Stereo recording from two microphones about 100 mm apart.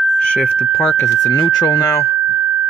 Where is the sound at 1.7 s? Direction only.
35° left (ahead or behind).